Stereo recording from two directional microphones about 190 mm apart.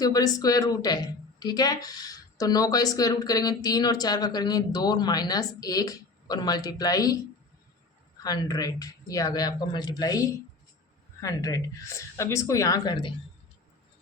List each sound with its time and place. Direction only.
0.0 s speech: 20° left (ahead or behind)
8.2 s speech: 20° left (ahead or behind)